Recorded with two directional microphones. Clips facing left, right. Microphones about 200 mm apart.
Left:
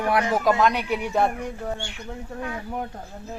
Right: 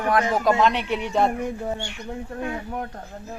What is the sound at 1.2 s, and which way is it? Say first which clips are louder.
Speech: right 2 dB; 20° right (ahead or behind).